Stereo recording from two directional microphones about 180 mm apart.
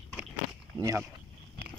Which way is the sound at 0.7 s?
20° right (ahead or behind).